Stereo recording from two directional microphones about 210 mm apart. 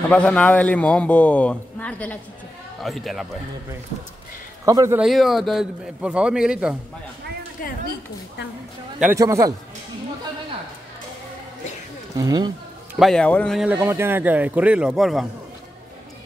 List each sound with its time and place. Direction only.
0.1 s a man's voice: 5° left (ahead or behind)
4.6 s a man's voice: 15° right (ahead or behind)
5.0 s speech: centre (ahead or behind)
7.6 s speech: 40° left (ahead or behind)
9.0 s a man's voice: 15° right (ahead or behind)
12.2 s speech: 20° right (ahead or behind)
13.0 s speech: 5° left (ahead or behind)